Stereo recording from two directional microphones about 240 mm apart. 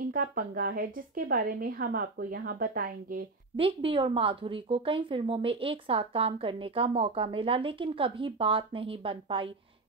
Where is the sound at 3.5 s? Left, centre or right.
Right.